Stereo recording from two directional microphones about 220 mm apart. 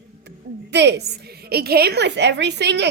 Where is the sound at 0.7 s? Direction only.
50° right (ahead or behind).